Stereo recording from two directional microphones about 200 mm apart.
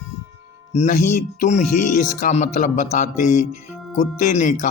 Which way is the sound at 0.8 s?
35° left (ahead or behind).